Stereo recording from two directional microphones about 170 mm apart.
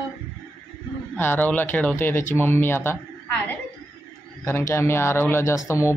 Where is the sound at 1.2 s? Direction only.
10° left (ahead or behind).